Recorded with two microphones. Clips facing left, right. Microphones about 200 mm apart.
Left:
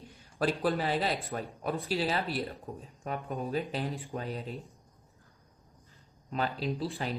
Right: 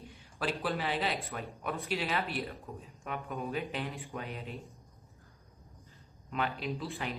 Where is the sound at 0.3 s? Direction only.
40° left (ahead or behind).